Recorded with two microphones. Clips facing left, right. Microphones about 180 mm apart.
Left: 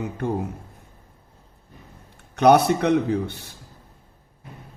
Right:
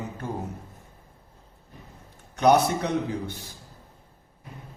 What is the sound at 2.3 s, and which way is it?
A man's voice, 65° left (ahead or behind).